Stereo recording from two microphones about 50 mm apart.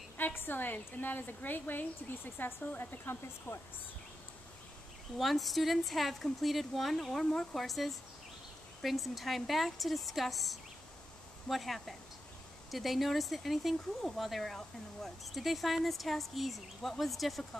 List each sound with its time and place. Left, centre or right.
0.2 s a woman's voice: left
3.5 s speech: left
5.2 s speech: centre